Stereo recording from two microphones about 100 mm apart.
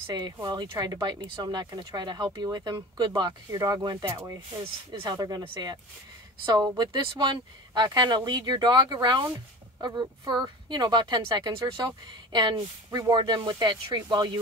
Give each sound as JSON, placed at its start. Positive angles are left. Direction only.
{"t": 0.1, "sound": "speech", "side_deg": -45}